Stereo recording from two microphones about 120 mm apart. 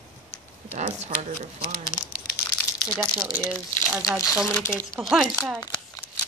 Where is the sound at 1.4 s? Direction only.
75° right (ahead or behind).